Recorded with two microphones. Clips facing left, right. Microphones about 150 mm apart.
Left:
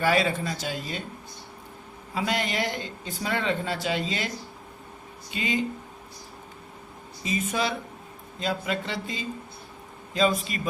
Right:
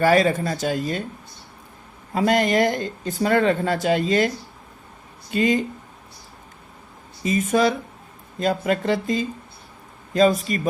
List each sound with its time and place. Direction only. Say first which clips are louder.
0.0 s speech: right 6 dB; 45° right (ahead or behind)
2.1 s speech: right 9 dB; 45° right (ahead or behind)
5.3 s speech: right 8 dB; 45° right (ahead or behind)
7.3 s speech: right 8 dB; 45° right (ahead or behind)